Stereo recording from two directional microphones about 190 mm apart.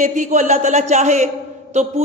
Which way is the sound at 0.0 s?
40° right (ahead or behind).